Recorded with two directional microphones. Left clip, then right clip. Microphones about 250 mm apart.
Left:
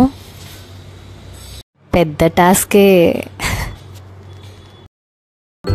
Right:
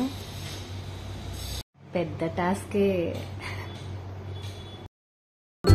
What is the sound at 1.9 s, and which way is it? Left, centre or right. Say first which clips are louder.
A woman's voice: left 17 dB; left.